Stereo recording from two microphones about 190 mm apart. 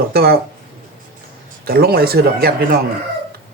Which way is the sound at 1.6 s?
55° right (ahead or behind).